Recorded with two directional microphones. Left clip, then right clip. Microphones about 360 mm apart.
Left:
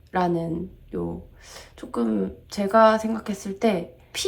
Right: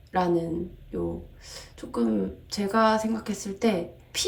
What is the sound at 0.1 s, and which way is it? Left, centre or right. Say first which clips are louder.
A woman's voice: left 1 dB; centre.